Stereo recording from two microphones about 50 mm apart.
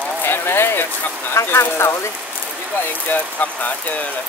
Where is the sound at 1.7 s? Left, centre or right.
Left.